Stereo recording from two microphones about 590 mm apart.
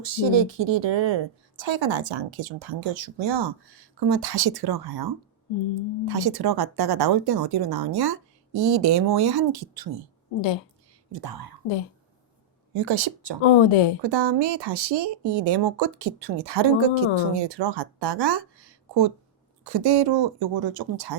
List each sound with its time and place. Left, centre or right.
0.0 s speech: right
11.1 s speech: right
12.7 s speech: right
13.4 s speech: left
14.0 s speech: right